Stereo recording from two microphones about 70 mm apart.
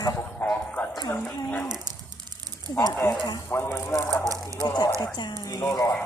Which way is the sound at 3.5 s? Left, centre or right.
Left.